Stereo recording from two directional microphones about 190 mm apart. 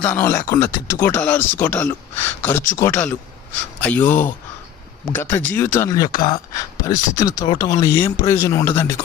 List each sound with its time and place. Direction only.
0.0 s speech: 10° left (ahead or behind)